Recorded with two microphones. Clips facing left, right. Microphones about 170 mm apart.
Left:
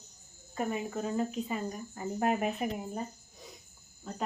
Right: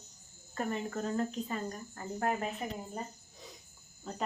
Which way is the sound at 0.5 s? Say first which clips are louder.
Left 2 dB; 10° left (ahead or behind).